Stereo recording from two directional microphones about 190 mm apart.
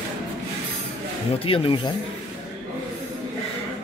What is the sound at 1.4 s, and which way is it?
Speech, 30° left (ahead or behind).